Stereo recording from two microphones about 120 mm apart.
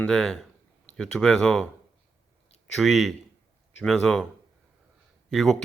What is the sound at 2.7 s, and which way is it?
Speech, centre (ahead or behind).